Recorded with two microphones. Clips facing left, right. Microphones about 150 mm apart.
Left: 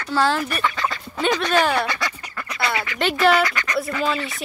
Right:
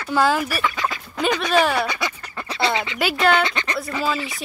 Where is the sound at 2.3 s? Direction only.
25° right (ahead or behind).